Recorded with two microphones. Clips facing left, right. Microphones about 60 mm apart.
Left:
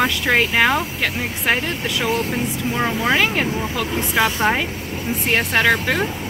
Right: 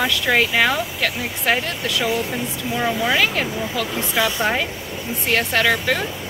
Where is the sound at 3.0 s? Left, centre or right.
Left.